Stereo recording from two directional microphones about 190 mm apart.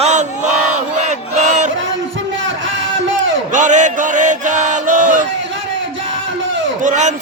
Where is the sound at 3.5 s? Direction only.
40° right (ahead or behind).